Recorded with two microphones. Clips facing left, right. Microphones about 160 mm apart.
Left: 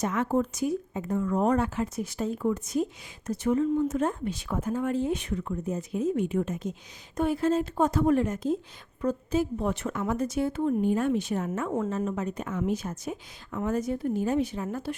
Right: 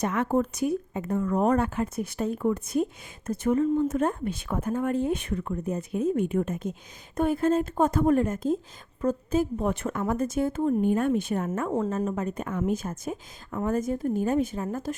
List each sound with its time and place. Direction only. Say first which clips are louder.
0.0 s speech: right 1 dB; 60° right (ahead or behind); by 14.9 s 45° right (ahead or behind)